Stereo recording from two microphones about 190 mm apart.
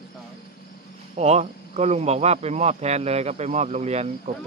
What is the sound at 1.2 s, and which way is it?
Speech, 35° right (ahead or behind).